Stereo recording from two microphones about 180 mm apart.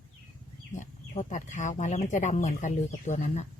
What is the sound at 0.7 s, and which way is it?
Speech, 45° left (ahead or behind).